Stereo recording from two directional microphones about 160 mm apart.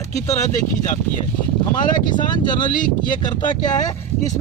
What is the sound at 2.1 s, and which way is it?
Speech, 25° left (ahead or behind).